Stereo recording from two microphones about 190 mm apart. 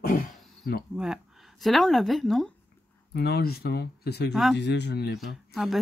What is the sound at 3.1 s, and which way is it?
Speech, 55° left (ahead or behind).